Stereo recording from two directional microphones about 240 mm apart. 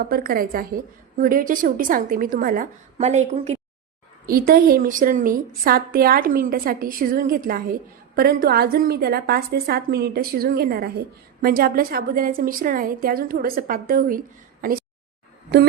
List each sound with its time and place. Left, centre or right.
0.0 s a woman's voice: right
4.3 s a woman's voice: right